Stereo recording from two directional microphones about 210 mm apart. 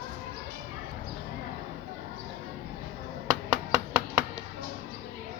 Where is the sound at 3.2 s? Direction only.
20° right (ahead or behind).